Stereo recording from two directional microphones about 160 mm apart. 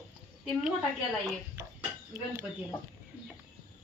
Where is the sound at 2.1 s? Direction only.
20° right (ahead or behind).